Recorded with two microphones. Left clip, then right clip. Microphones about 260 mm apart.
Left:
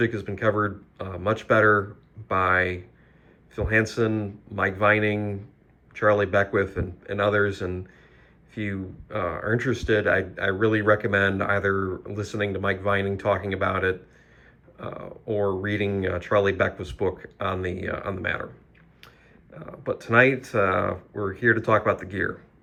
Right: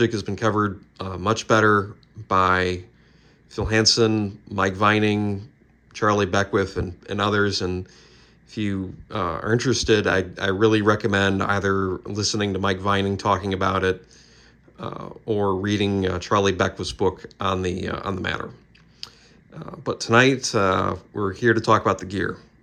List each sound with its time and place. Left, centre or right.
0.0 s speech: centre